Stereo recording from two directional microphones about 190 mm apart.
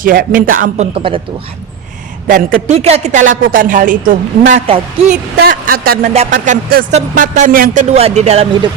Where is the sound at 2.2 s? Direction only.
45° right (ahead or behind).